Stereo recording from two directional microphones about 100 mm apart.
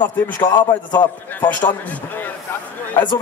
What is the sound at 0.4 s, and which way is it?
Speech, 45° left (ahead or behind).